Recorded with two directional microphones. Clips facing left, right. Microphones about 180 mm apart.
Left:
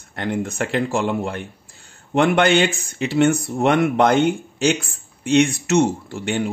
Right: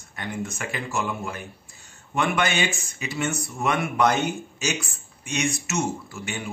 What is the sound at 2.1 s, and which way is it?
Speech, 75° left (ahead or behind).